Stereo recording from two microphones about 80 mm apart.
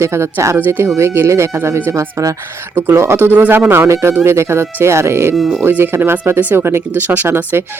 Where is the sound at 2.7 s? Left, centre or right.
Right.